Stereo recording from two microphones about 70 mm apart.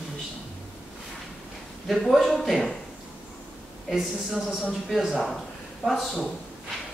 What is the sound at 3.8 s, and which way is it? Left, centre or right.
Speech, centre.